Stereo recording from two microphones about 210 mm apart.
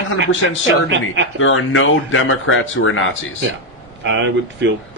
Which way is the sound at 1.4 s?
65° left (ahead or behind).